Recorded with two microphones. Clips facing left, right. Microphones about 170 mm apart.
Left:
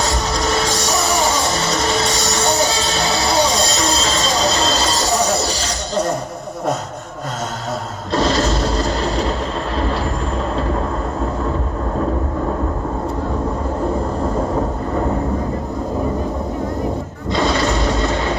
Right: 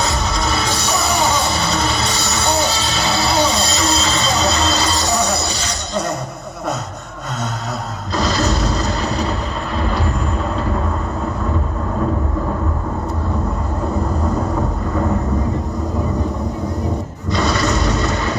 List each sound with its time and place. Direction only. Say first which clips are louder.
0.0 s music: left 1 dB; 35° left (ahead or behind)
5.5 s horse: left 2 dB; 35° left (ahead or behind)
8.1 s a sound: left 2 dB; 30° left (ahead or behind)